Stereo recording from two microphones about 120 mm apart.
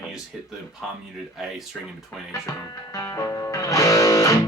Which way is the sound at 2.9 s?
25° left (ahead or behind).